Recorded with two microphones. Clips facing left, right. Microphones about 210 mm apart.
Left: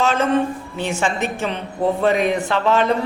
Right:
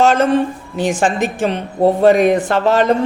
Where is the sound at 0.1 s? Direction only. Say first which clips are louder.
Right 5 dB; 75° right (ahead or behind).